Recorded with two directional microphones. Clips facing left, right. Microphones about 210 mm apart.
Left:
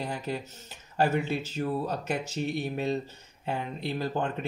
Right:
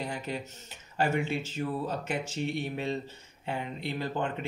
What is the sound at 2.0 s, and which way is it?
Speech, 40° left (ahead or behind).